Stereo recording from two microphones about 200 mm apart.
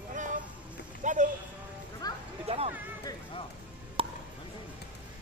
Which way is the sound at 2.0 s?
20° left (ahead or behind).